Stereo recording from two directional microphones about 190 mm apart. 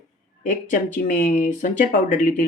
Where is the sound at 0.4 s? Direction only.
45° left (ahead or behind).